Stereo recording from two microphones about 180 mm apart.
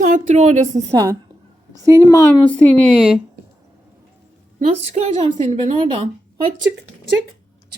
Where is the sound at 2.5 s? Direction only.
5° left (ahead or behind).